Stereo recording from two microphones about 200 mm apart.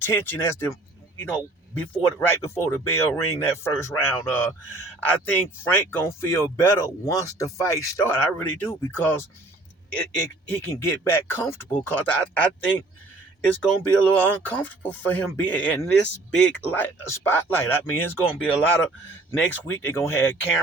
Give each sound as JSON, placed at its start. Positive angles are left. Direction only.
{"t": 0.0, "sound": "speech", "side_deg": 10}
{"t": 1.8, "sound": "speech", "side_deg": 10}
{"t": 14.0, "sound": "speech", "side_deg": 10}